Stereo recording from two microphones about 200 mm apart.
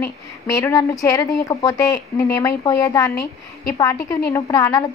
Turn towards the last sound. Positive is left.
turn(degrees=15)  # may be behind; listen again after turning